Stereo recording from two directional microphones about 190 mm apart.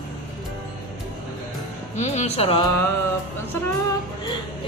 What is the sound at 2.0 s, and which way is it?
Speech, 35° left (ahead or behind).